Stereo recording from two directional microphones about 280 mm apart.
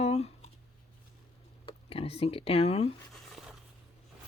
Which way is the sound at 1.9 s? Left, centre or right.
Left.